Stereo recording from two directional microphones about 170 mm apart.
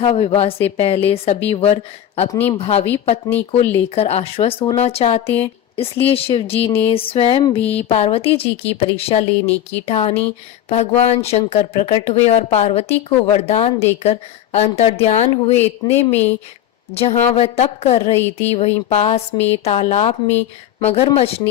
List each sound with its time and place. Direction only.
0.0 s a woman's voice: 35° left (ahead or behind)
3.9 s a woman's voice: 35° left (ahead or behind)
5.2 s speech: 10° left (ahead or behind)
5.7 s a woman's voice: 35° left (ahead or behind)